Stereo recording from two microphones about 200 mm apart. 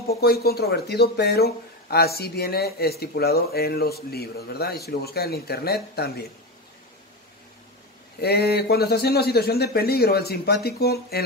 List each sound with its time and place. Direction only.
0.1 s speech: 50° left (ahead or behind)
8.2 s speech: 50° left (ahead or behind)